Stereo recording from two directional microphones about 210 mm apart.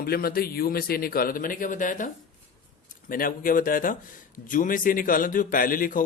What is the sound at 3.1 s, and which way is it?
A man's voice, 40° left (ahead or behind).